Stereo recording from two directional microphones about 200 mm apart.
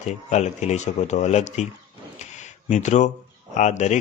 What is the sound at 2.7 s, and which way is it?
A man's voice, 35° left (ahead or behind).